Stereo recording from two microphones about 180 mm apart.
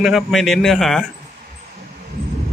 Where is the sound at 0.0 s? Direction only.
Centre (ahead or behind).